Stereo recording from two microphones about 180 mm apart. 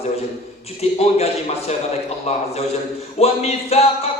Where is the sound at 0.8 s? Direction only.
35° left (ahead or behind).